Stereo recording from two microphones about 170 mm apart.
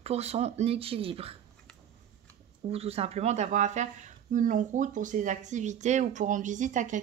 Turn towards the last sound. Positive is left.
turn(degrees=-45)  # may be behind; listen again after turning